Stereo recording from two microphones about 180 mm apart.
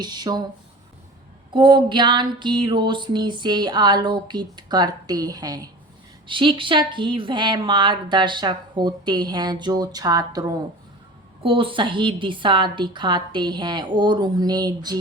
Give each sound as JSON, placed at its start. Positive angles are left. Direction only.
{"t": 0.0, "sound": "speech", "side_deg": -25}
{"t": 1.5, "sound": "speech", "side_deg": -25}